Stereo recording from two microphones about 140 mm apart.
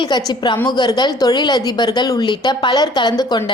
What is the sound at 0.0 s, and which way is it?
A woman's voice, 30° left (ahead or behind).